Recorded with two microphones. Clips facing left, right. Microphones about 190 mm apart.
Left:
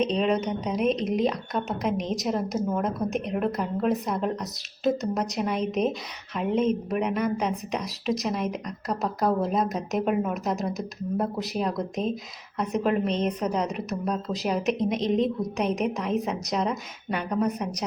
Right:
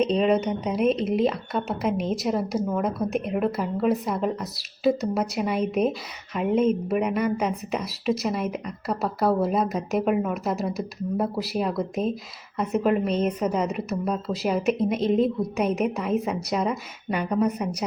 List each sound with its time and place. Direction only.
0.0 s a woman's voice: 5° right (ahead or behind)